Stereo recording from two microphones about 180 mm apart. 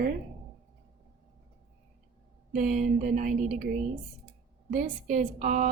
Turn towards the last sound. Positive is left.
turn(degrees=-45)  # may be behind; listen again after turning